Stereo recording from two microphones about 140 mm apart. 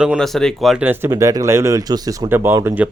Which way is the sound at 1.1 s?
25° right (ahead or behind).